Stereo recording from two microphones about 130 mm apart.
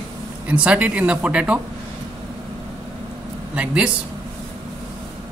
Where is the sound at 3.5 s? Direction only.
10° right (ahead or behind).